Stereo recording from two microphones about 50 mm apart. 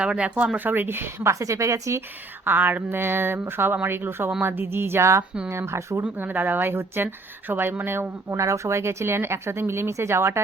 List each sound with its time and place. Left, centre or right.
0.0 s speech: right
2.4 s speech: right
6.0 s speech: right
8.3 s speech: right